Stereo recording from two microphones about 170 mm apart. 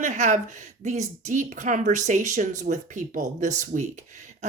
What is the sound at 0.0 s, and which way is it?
Speech, 45° right (ahead or behind).